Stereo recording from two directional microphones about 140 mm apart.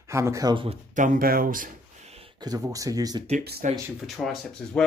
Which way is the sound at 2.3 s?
30° right (ahead or behind).